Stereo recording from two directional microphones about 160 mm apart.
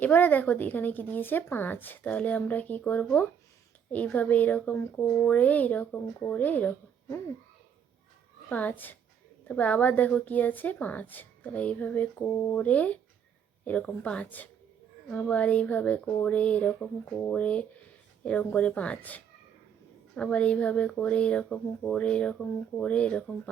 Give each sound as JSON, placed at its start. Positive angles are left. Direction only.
{"t": 0.0, "sound": "a woman's voice", "side_deg": 10}
{"t": 8.4, "sound": "a woman's voice", "side_deg": 10}